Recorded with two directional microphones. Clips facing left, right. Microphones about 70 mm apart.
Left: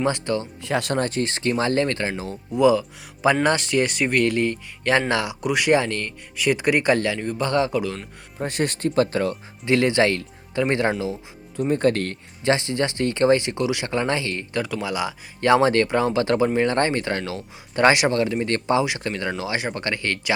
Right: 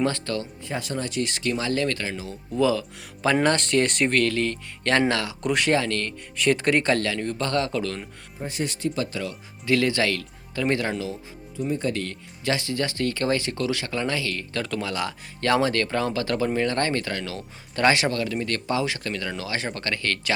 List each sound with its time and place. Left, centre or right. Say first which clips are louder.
0.0 s speech: left 3 dB; centre
0.6 s speech: left 7 dB; left
2.5 s speech: left 5 dB; centre
4.2 s speech: left 3 dB; centre
6.3 s speech: left 1 dB; centre
8.4 s speech: left 5 dB; left
9.6 s speech: left 4 dB; left
11.5 s speech: left 6 dB; left
12.5 s speech: left 4 dB; left
14.5 s speech: left 4 dB; centre